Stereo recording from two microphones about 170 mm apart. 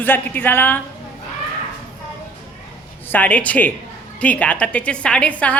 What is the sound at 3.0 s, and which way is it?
A woman's voice, 10° left (ahead or behind).